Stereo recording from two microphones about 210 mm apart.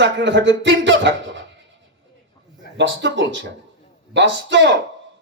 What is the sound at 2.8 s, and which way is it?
Speech, 60° right (ahead or behind).